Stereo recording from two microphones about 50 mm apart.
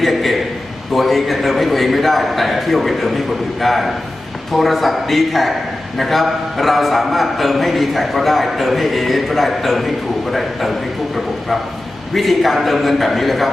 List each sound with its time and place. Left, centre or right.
0.0 s a sound: centre
0.9 s a man's voice: centre
12.1 s a man's voice: centre